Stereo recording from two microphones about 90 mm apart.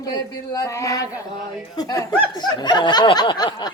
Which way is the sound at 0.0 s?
45° left (ahead or behind).